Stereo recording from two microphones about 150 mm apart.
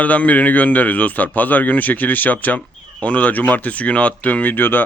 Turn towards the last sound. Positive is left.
turn(degrees=15)  # may be behind; listen again after turning